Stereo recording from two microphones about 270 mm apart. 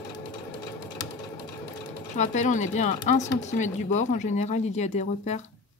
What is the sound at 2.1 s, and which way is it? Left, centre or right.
Speech, left.